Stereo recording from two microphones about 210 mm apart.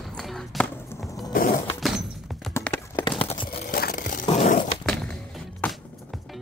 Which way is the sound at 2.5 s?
10° left (ahead or behind).